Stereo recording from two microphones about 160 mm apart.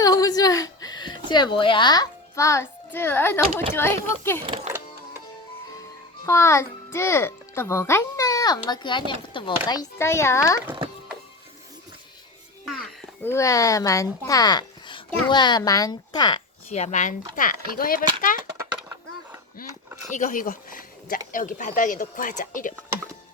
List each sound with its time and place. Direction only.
0.0 s a woman's voice: 25° left (ahead or behind)
6.2 s a child's voice: 15° left (ahead or behind)
12.6 s music: centre (ahead or behind)
13.2 s speech: 20° left (ahead or behind)
16.6 s speech: 45° left (ahead or behind); by 18.3 s 60° left (ahead or behind)
18.5 s skateboard: 15° right (ahead or behind)
19.6 s speech: 65° left (ahead or behind)
20.1 s speech: 50° left (ahead or behind)